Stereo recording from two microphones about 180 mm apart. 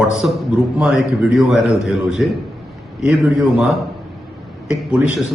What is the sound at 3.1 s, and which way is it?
Speech, centre (ahead or behind).